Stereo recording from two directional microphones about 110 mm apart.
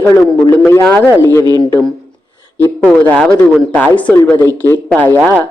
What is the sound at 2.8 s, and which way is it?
A man's voice, 15° left (ahead or behind).